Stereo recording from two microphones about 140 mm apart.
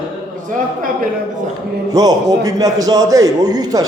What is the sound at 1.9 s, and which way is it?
A man's voice, 25° right (ahead or behind).